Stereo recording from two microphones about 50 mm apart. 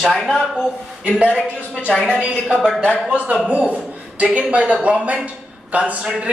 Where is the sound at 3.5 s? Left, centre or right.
Right.